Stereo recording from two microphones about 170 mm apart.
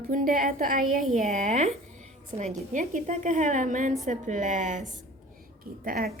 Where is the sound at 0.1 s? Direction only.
55° right (ahead or behind).